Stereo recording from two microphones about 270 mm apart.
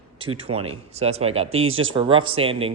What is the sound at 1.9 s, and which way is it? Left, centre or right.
Speech, centre.